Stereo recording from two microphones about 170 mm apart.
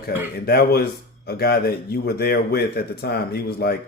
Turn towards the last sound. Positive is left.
turn(degrees=65)  # may be behind; listen again after turning